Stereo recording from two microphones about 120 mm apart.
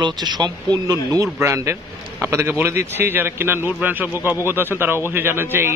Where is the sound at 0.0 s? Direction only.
35° right (ahead or behind).